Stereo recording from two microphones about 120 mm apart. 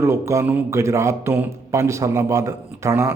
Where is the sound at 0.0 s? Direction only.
25° right (ahead or behind).